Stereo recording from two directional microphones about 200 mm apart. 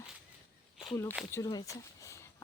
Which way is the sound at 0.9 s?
15° left (ahead or behind).